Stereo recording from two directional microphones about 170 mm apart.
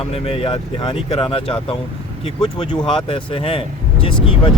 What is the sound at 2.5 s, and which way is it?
Speech, 30° left (ahead or behind).